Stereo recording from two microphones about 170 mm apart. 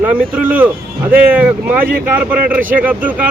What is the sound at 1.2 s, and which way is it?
Speech, 10° right (ahead or behind).